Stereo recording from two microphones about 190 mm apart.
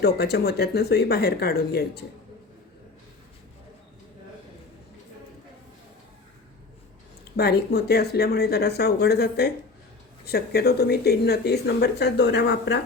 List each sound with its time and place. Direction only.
0.0 s speech: 60° left (ahead or behind)
7.3 s speech: 60° left (ahead or behind)